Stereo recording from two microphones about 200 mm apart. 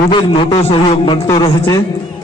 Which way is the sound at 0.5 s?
30° left (ahead or behind).